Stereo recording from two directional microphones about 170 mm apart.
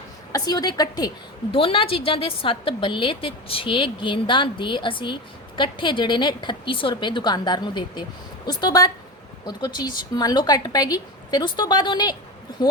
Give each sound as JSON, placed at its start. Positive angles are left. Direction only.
{"t": 0.3, "sound": "a woman's voice", "side_deg": 20}
{"t": 1.5, "sound": "a woman's voice", "side_deg": 30}